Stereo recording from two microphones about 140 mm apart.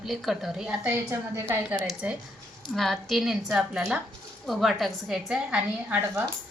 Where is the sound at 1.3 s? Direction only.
15° right (ahead or behind).